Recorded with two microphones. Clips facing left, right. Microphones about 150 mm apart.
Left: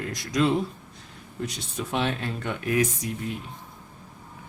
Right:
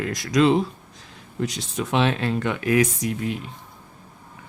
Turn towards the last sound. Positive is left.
turn(degrees=-90)